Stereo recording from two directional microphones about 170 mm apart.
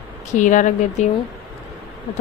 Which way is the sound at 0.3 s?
50° left (ahead or behind).